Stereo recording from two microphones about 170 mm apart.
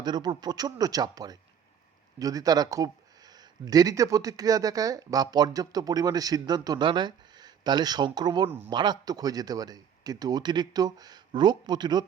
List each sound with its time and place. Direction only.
0.0 s speech: 25° right (ahead or behind)
8.4 s speech: 10° right (ahead or behind)
8.7 s speech: 25° right (ahead or behind)